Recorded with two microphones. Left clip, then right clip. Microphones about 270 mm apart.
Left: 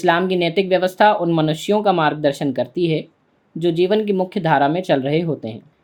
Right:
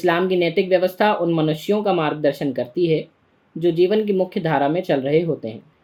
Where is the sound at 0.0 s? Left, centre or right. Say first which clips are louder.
Left 1 dB; left.